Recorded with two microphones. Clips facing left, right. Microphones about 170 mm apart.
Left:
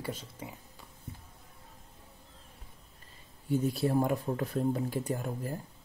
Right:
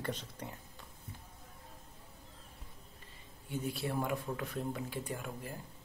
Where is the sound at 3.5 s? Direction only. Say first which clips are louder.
Left 9 dB; 40° left (ahead or behind).